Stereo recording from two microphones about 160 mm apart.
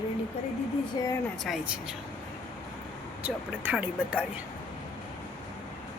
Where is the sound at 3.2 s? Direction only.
10° right (ahead or behind).